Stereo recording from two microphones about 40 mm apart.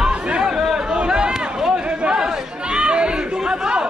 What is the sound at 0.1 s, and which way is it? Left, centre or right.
Chatter, right.